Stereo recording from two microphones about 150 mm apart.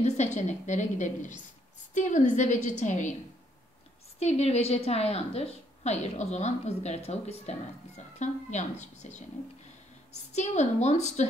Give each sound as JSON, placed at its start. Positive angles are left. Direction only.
{"t": 0.0, "sound": "a woman's voice", "side_deg": 50}
{"t": 4.2, "sound": "a woman's voice", "side_deg": 45}